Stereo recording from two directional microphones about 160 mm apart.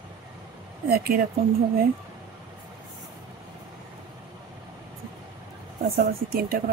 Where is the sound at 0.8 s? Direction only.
70° right (ahead or behind).